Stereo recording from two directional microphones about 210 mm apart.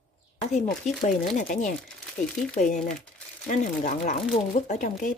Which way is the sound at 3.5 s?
35° left (ahead or behind).